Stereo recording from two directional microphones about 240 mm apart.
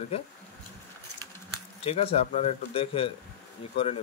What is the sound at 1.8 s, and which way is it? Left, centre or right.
Speech, left.